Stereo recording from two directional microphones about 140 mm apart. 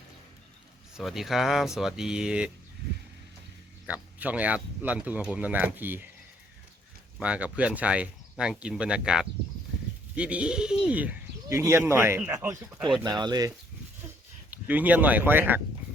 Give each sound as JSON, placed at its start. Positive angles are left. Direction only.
{"t": 0.9, "sound": "speech", "side_deg": 0}
{"t": 3.8, "sound": "speech", "side_deg": -10}
{"t": 7.2, "sound": "speech", "side_deg": -10}
{"t": 14.5, "sound": "speech", "side_deg": -10}